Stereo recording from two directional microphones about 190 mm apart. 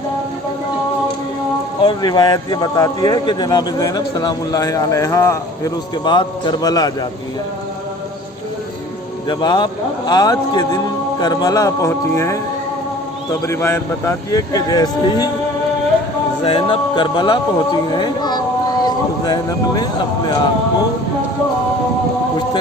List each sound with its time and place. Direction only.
1.8 s a man's voice: 25° left (ahead or behind)
9.2 s a man's voice: 25° left (ahead or behind)
13.4 s a man's voice: 15° left (ahead or behind)
16.4 s speech: 30° left (ahead or behind)